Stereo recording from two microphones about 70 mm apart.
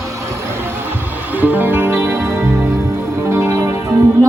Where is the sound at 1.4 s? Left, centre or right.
Right.